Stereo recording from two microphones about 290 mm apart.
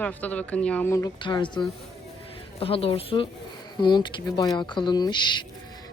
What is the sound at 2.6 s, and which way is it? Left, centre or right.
Speech, centre.